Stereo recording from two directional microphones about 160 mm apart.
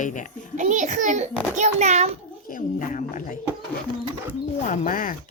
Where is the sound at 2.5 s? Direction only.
55° left (ahead or behind).